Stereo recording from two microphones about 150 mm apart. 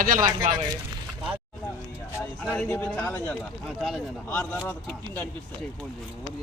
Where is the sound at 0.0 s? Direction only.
65° right (ahead or behind).